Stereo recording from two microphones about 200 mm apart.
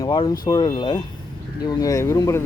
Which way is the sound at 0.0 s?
20° left (ahead or behind).